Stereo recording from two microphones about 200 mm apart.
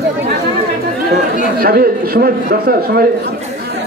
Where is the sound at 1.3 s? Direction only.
45° right (ahead or behind).